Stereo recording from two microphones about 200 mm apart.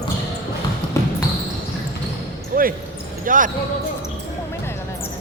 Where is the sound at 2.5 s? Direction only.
45° right (ahead or behind).